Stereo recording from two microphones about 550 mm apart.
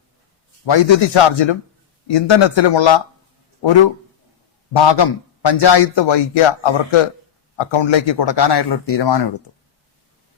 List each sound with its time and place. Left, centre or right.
0.6 s a man's voice: left